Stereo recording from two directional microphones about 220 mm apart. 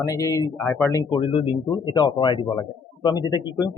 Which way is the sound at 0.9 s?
20° left (ahead or behind).